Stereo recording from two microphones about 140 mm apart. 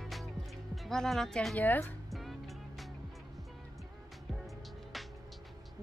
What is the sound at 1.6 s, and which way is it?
Speech, 10° left (ahead or behind).